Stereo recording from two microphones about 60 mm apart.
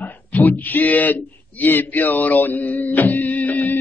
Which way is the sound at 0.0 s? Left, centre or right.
Left.